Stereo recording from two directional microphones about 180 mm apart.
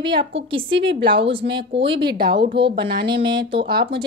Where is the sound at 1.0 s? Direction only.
30° right (ahead or behind).